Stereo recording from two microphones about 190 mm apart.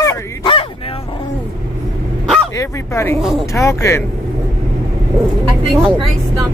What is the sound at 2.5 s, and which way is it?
Honk, 15° left (ahead or behind).